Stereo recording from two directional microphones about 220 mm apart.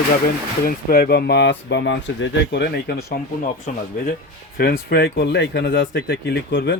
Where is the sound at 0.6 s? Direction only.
40° left (ahead or behind).